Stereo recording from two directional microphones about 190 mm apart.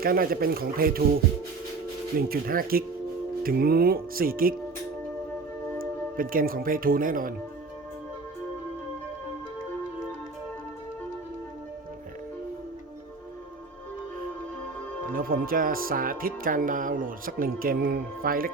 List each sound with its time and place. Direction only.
0.0 s speech: 50° right (ahead or behind)
2.1 s speech: 50° right (ahead or behind)
5.8 s speech: 50° right (ahead or behind)
15.1 s speech: 50° right (ahead or behind)